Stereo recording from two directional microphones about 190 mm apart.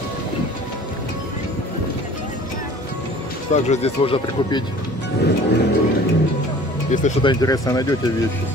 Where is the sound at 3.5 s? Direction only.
35° left (ahead or behind).